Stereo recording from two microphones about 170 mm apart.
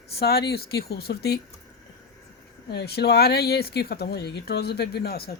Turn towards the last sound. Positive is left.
turn(degrees=65)  # may be behind; listen again after turning